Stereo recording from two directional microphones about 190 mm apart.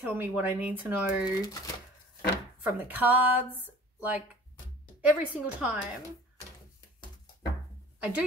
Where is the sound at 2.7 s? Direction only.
10° right (ahead or behind).